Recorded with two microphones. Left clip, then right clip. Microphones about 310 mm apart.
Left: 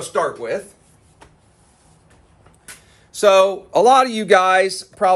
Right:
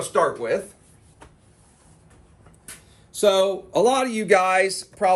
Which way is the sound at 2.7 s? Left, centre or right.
Centre.